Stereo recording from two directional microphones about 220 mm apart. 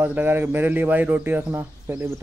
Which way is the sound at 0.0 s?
10° right (ahead or behind).